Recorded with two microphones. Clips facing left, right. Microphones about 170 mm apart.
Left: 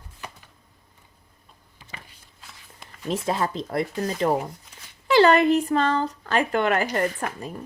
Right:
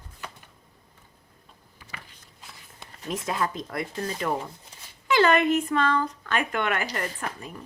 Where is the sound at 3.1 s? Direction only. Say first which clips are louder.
Left 3 dB; 30° left (ahead or behind).